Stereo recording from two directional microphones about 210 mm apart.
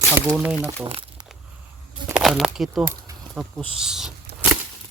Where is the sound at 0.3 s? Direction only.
5° right (ahead or behind).